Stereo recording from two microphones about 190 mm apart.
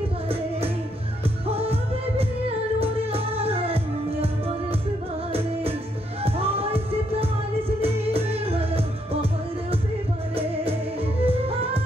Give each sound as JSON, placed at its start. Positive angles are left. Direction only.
{"t": 1.5, "sound": "music", "side_deg": -30}
{"t": 5.3, "sound": "music", "side_deg": -30}